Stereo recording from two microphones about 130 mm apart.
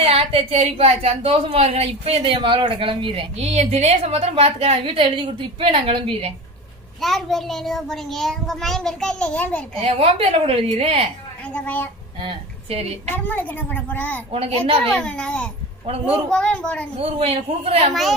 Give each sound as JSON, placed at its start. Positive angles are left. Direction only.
{"t": 0.0, "sound": "a woman's voice", "side_deg": -50}
{"t": 7.0, "sound": "a child's voice", "side_deg": 0}
{"t": 9.8, "sound": "a woman's voice", "side_deg": -50}
{"t": 11.5, "sound": "a woman's voice", "side_deg": 10}
{"t": 12.2, "sound": "a woman's voice", "side_deg": -45}
{"t": 13.1, "sound": "a woman's voice", "side_deg": 15}
{"t": 14.3, "sound": "a woman's voice", "side_deg": -50}
{"t": 14.8, "sound": "a woman's voice", "side_deg": 10}
{"t": 17.0, "sound": "a woman's voice", "side_deg": -50}